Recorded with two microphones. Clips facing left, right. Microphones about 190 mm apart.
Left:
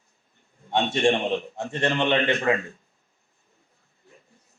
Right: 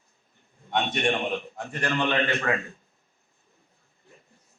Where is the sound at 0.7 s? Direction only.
30° left (ahead or behind).